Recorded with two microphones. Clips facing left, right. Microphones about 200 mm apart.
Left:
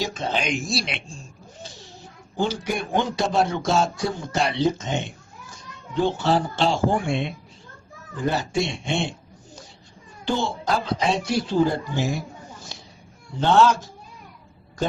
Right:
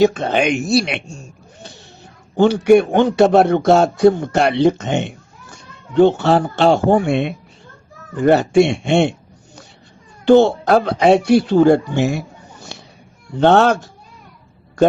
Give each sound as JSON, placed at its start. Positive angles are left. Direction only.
{"t": 0.0, "sound": "speech", "side_deg": -60}
{"t": 2.3, "sound": "speech", "side_deg": -65}
{"t": 10.2, "sound": "speech", "side_deg": -65}
{"t": 12.7, "sound": "a sound", "side_deg": -65}
{"t": 13.4, "sound": "speech", "side_deg": -60}